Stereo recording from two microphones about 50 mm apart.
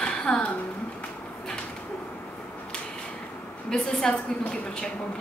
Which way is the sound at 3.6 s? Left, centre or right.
Centre.